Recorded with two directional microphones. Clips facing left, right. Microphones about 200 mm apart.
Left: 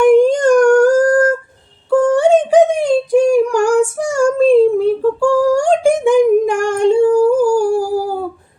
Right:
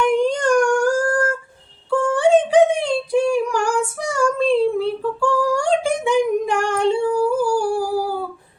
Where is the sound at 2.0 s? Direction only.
45° left (ahead or behind).